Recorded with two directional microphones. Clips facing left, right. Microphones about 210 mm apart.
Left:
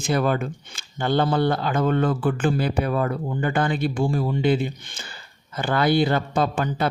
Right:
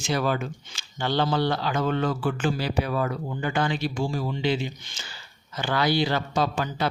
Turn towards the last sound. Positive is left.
turn(degrees=55)  # may be behind; listen again after turning